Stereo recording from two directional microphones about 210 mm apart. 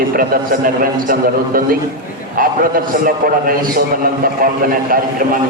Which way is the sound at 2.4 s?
40° right (ahead or behind).